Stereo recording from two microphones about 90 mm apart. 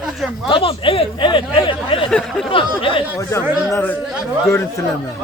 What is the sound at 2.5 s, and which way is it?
Speech, 75° left (ahead or behind).